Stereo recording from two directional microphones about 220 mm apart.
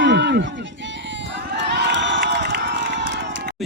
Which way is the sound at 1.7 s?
50° right (ahead or behind).